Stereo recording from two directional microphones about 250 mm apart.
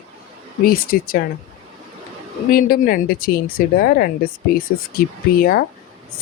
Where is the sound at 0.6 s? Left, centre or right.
Left.